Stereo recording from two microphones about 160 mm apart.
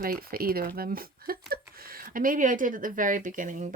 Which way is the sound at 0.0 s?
65° right (ahead or behind).